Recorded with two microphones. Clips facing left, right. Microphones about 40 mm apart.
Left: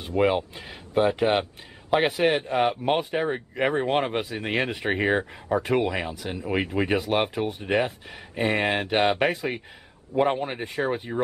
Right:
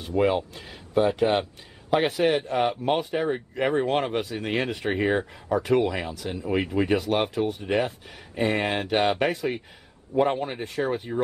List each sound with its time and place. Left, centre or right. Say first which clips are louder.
0.2 s speech: left 1 dB; centre
1.2 s speech: even; centre
7.4 s speech: right 2 dB; left
8.4 s speech: left 1 dB; centre